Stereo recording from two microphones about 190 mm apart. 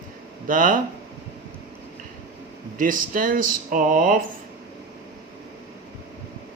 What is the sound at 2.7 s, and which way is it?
Speech, 45° right (ahead or behind).